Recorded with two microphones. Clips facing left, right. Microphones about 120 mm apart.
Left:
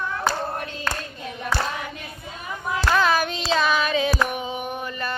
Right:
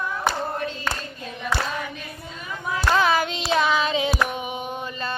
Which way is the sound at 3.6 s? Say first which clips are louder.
Right 1 dB; 20° right (ahead or behind).